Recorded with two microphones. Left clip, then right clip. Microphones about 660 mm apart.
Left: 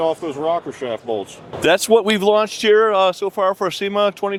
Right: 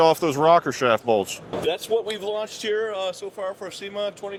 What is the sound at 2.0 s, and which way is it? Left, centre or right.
Speech, left.